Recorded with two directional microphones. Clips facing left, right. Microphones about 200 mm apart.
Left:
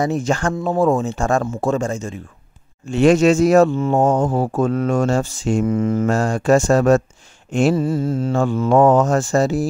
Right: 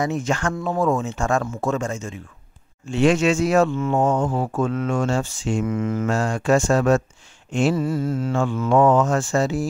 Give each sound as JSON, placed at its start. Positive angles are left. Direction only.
{"t": 0.0, "sound": "speech", "side_deg": 35}
{"t": 7.7, "sound": "speech", "side_deg": 30}